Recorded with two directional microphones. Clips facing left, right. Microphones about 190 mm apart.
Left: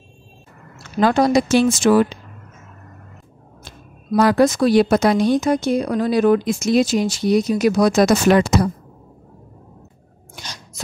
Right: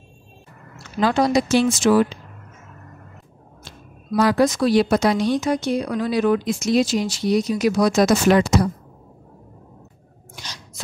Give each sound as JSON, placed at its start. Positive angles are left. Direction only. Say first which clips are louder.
{"t": 0.9, "sound": "speech", "louder": "left 3 dB", "side_deg": 50}
{"t": 3.6, "sound": "speech", "louder": "left 3 dB", "side_deg": 50}
{"t": 10.3, "sound": "a sound", "louder": "left 2 dB", "side_deg": 45}